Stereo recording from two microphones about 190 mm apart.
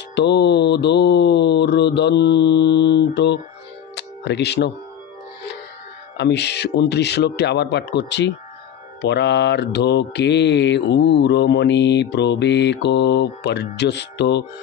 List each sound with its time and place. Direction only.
0.1 s mantra: 65° left (ahead or behind)
3.9 s music: 65° left (ahead or behind)
6.1 s mantra: 60° left (ahead or behind)